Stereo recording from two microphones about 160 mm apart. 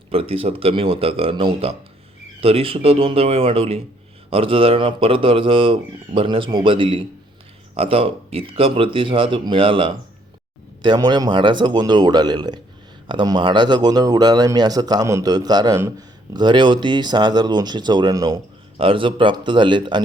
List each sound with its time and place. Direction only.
0.1 s speech: 35° right (ahead or behind)